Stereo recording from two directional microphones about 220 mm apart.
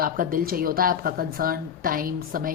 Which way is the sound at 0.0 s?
40° right (ahead or behind).